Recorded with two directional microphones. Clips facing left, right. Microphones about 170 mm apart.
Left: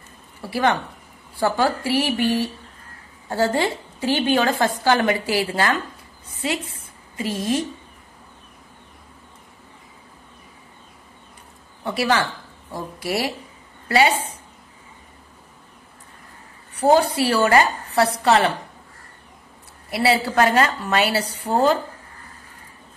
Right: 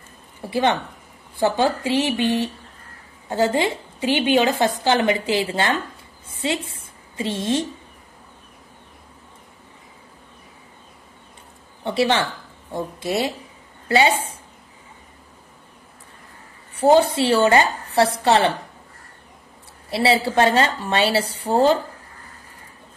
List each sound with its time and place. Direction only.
0.4 s a woman's voice: 20° right (ahead or behind)
11.8 s a woman's voice: 25° right (ahead or behind)
16.8 s a woman's voice: 25° right (ahead or behind)
19.9 s a woman's voice: 25° right (ahead or behind)